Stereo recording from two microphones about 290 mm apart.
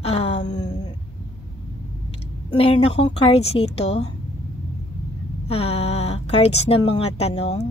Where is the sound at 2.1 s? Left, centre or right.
Centre.